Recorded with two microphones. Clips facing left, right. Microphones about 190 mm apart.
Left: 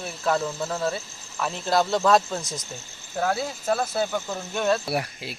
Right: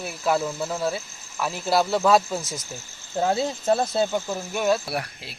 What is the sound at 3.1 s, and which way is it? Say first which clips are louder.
Speech: right 3 dB; 20° right (ahead or behind).